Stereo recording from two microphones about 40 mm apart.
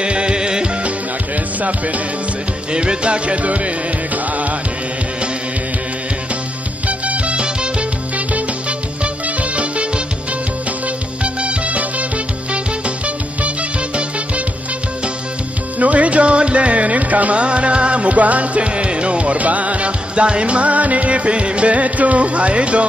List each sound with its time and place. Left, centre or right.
0.0 s music: right
1.6 s music: right
2.7 s music: right
6.9 s music: right
11.2 s music: right
15.8 s music: right